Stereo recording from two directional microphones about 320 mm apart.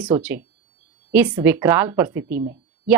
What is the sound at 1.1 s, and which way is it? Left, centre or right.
Speech, centre.